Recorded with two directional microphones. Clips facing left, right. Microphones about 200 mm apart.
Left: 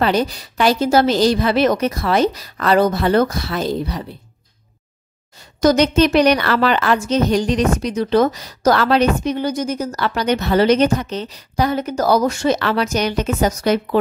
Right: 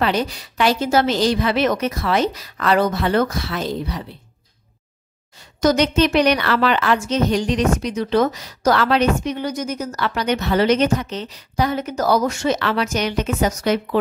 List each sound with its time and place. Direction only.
0.0 s speech: 40° left (ahead or behind)
5.3 s speech: 35° left (ahead or behind)